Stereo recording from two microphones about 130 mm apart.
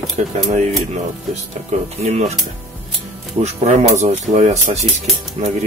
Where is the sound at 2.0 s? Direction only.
55° right (ahead or behind).